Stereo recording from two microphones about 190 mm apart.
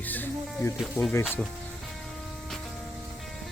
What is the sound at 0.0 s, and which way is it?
Music, 10° left (ahead or behind).